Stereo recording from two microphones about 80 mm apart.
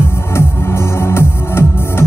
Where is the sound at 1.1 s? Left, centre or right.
Left.